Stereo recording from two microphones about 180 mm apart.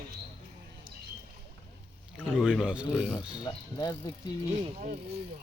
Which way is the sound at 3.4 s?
20° left (ahead or behind).